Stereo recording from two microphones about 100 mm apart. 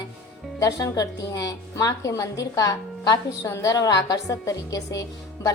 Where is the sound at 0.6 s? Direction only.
35° left (ahead or behind).